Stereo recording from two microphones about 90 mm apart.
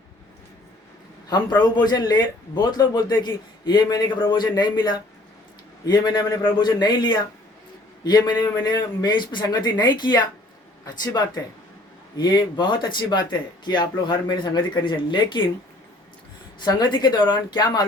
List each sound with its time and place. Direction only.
1.3 s a man's voice: 55° left (ahead or behind)
16.7 s a man's voice: 50° left (ahead or behind)